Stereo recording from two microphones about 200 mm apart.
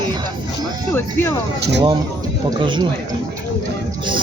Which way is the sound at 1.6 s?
60° right (ahead or behind).